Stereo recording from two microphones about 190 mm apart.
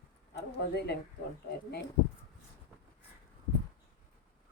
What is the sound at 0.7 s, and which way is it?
Speech, 60° left (ahead or behind).